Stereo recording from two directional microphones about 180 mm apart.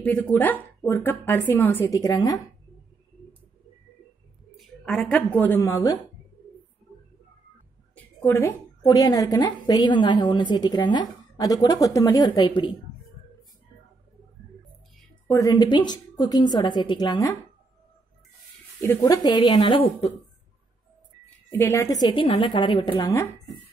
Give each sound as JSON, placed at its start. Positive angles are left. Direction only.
{"t": 0.0, "sound": "speech", "side_deg": 10}
{"t": 4.6, "sound": "a woman's voice", "side_deg": 5}
{"t": 7.9, "sound": "a woman's voice", "side_deg": 10}
{"t": 15.2, "sound": "a woman's voice", "side_deg": 20}
{"t": 18.8, "sound": "a woman's voice", "side_deg": 15}
{"t": 21.5, "sound": "a woman's voice", "side_deg": 15}
{"t": 22.1, "sound": "a woman's voice", "side_deg": 30}